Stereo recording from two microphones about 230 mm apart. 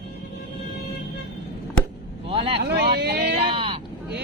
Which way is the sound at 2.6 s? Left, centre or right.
Right.